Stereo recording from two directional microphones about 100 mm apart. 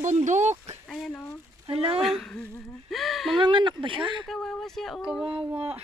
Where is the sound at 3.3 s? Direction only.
50° right (ahead or behind).